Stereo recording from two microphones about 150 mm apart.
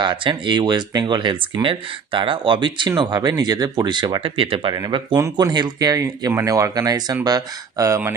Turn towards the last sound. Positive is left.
turn(degrees=-20)  # may be behind; listen again after turning